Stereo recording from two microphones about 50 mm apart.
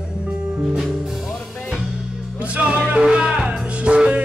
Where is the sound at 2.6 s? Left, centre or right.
Right.